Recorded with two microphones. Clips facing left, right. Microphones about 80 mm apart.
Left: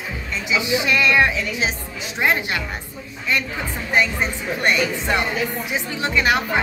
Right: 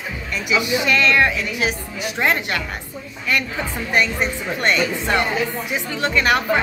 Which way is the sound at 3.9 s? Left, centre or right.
Centre.